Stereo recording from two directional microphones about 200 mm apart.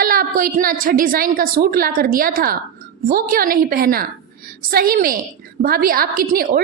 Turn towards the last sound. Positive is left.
turn(degrees=-45)  # may be behind; listen again after turning